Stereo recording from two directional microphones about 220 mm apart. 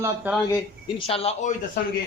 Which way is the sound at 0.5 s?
25° left (ahead or behind).